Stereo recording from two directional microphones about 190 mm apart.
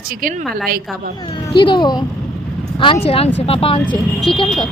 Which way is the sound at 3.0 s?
30° left (ahead or behind).